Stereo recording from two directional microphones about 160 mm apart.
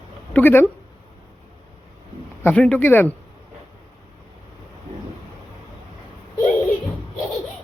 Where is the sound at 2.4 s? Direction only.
10° left (ahead or behind).